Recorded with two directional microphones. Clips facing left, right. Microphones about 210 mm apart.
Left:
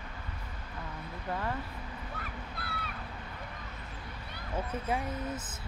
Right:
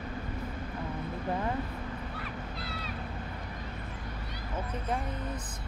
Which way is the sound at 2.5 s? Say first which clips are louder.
Right 3 dB; 55° left (ahead or behind).